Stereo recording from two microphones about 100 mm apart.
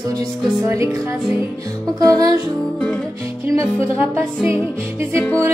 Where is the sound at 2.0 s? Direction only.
40° right (ahead or behind).